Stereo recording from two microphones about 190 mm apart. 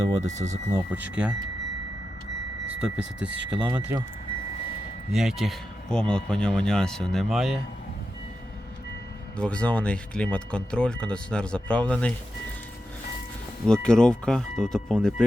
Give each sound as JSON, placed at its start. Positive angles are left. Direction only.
{"t": 0.0, "sound": "speech", "side_deg": -20}
{"t": 0.3, "sound": "speech", "side_deg": -35}
{"t": 0.9, "sound": "speech", "side_deg": -5}
{"t": 2.6, "sound": "speech", "side_deg": -5}
{"t": 5.1, "sound": "speech", "side_deg": 0}
{"t": 9.4, "sound": "speech", "side_deg": 5}
{"t": 13.8, "sound": "speech", "side_deg": 5}